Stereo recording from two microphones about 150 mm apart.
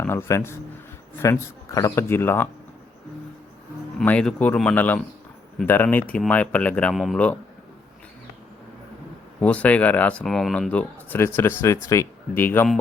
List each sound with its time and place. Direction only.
0.0 s speech: 15° left (ahead or behind)
3.9 s speech: 5° left (ahead or behind)
9.4 s speech: 10° left (ahead or behind)